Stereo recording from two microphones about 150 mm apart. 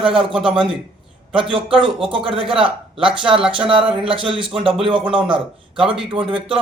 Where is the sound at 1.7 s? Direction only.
35° right (ahead or behind).